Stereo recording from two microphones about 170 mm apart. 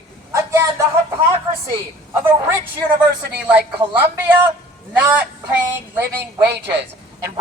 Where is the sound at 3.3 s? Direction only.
10° right (ahead or behind).